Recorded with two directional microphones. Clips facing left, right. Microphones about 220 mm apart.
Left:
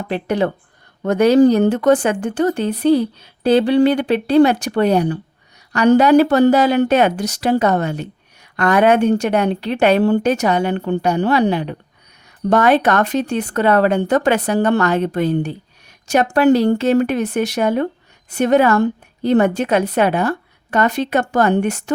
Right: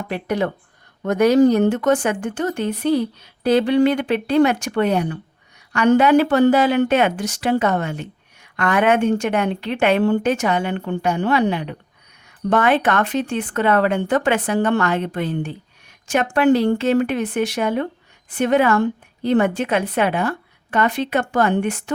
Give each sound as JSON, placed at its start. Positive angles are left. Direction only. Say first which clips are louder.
{"t": 0.1, "sound": "speech", "louder": "left 4 dB", "side_deg": 30}